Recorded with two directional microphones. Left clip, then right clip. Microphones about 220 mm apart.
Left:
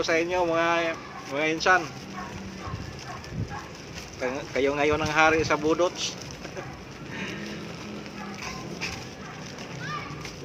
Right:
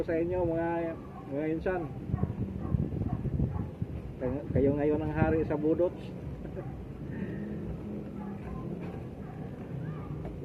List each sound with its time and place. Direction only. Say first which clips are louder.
0.0 s speech: left 6 dB; 40° left (ahead or behind)
4.3 s speech: left 3 dB; 40° left (ahead or behind)